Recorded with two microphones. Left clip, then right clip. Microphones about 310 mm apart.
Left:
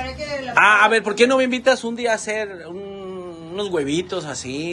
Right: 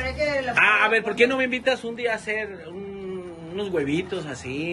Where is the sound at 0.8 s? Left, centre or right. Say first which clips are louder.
Left 4 dB; centre.